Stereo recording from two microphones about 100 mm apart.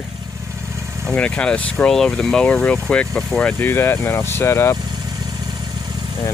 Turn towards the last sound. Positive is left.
turn(degrees=25)  # may be behind; listen again after turning